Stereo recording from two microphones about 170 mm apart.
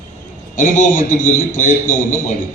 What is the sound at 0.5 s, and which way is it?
Speech, 50° left (ahead or behind).